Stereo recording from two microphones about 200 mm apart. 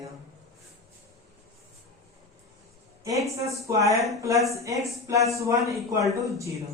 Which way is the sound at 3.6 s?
15° right (ahead or behind).